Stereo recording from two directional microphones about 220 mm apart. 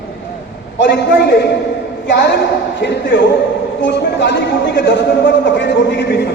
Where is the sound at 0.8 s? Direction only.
50° left (ahead or behind).